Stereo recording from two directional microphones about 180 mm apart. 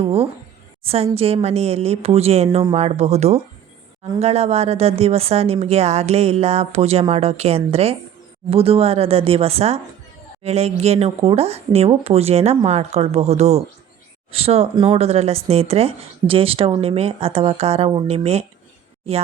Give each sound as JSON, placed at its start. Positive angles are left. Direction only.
{"t": 0.0, "sound": "speech", "side_deg": -35}